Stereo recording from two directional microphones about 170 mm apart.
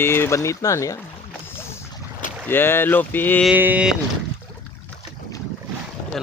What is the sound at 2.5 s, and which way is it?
Speech, 15° left (ahead or behind).